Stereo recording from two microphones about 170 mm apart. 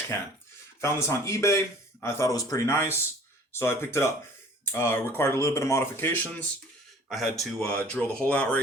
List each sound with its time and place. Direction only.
0.8 s a man's voice: 15° left (ahead or behind)
7.1 s speech: centre (ahead or behind)